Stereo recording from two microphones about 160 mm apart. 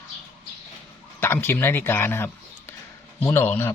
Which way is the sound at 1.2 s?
15° left (ahead or behind).